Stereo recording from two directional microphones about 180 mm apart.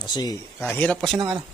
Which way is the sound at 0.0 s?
25° left (ahead or behind).